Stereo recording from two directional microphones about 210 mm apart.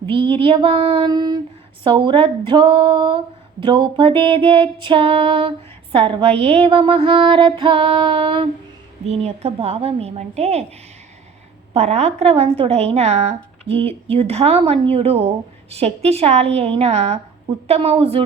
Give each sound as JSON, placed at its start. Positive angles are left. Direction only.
{"t": 0.0, "sound": "a sound", "side_deg": -25}
{"t": 0.4, "sound": "female singing", "side_deg": -25}
{"t": 11.7, "sound": "female singing", "side_deg": -30}